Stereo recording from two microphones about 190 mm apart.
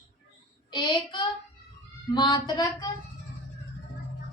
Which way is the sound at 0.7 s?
25° left (ahead or behind).